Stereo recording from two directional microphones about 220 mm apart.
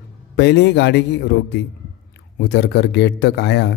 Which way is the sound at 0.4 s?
50° left (ahead or behind).